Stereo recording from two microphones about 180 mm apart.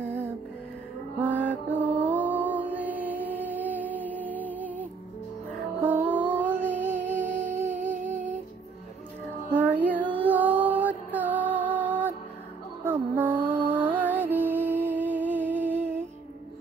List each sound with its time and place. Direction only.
1.2 s music: 10° right (ahead or behind)
6.0 s music: 10° right (ahead or behind)
7.8 s humming: 40° right (ahead or behind)
9.5 s music: 10° right (ahead or behind)